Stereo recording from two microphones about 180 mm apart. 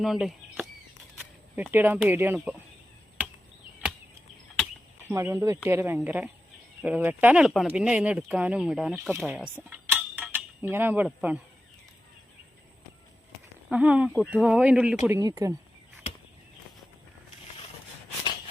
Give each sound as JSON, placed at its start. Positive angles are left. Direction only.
{"t": 0.0, "sound": "speech", "side_deg": 0}
{"t": 5.0, "sound": "speech", "side_deg": -15}
{"t": 9.6, "sound": "a sound", "side_deg": -10}
{"t": 13.7, "sound": "speech", "side_deg": -5}
{"t": 15.0, "sound": "speech", "side_deg": -15}